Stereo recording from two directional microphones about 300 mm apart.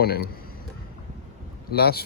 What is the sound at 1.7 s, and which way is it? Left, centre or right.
Speech, left.